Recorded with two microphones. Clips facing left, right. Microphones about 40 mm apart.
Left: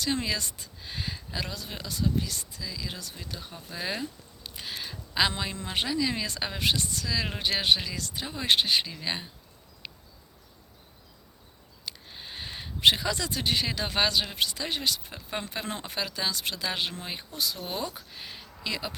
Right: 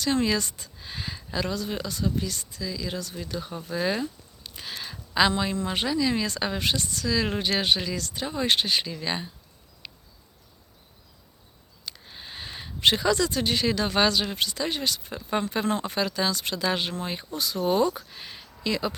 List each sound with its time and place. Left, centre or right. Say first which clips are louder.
0.0 s speech: right 5 dB; centre
9.8 s a sound: left 1 dB; centre
11.9 s speech: right 1 dB; centre